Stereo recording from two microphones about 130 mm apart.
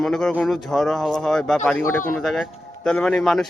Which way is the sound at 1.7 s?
15° left (ahead or behind).